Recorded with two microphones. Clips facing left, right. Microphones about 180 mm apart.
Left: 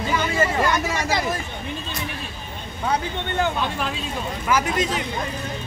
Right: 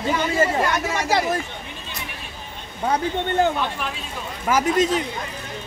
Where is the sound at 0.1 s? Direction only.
35° right (ahead or behind).